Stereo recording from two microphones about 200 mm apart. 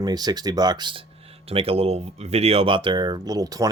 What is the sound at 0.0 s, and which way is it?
Speech, 20° right (ahead or behind).